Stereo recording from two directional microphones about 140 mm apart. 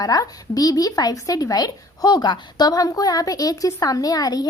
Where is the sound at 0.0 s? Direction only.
25° left (ahead or behind).